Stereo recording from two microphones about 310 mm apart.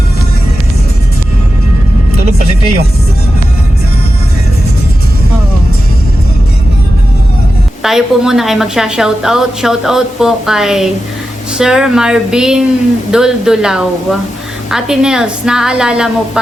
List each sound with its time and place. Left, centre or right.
7.8 s a woman's voice: centre